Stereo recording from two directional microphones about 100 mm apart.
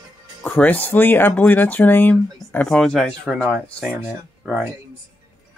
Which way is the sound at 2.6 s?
5° left (ahead or behind).